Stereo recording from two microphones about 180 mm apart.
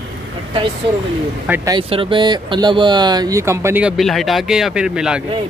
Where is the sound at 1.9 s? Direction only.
30° right (ahead or behind); by 5.2 s 5° right (ahead or behind).